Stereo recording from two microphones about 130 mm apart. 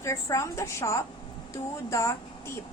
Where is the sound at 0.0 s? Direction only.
25° left (ahead or behind).